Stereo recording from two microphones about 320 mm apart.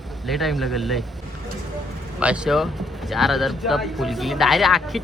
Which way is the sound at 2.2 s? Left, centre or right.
Centre.